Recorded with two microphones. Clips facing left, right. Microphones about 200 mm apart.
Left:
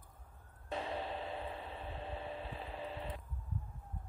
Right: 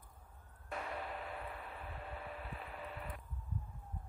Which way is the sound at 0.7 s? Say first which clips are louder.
Left 4 dB; 25° left (ahead or behind).